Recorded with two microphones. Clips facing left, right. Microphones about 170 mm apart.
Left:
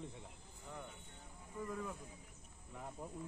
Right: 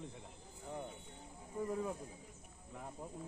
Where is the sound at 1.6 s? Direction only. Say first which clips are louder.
Right 5 dB; 30° right (ahead or behind).